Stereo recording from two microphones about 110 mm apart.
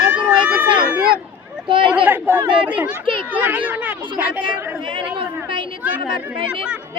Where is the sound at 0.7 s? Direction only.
45° right (ahead or behind).